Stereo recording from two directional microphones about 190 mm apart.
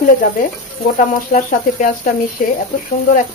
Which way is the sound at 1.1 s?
45° left (ahead or behind).